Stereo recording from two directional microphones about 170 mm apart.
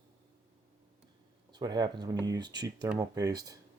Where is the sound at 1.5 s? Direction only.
25° right (ahead or behind).